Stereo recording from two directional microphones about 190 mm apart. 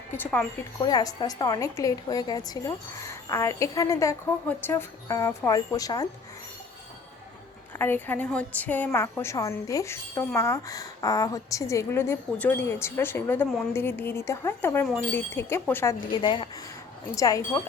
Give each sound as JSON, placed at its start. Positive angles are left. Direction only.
{"t": 0.1, "sound": "a woman's voice", "side_deg": 10}
{"t": 0.8, "sound": "a woman's voice", "side_deg": 20}
{"t": 7.8, "sound": "a woman's voice", "side_deg": 10}
{"t": 16.2, "sound": "a woman's voice", "side_deg": 25}